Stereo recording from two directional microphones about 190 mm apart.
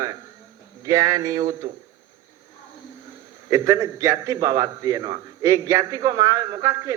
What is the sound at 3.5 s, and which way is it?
A man's voice, 20° right (ahead or behind).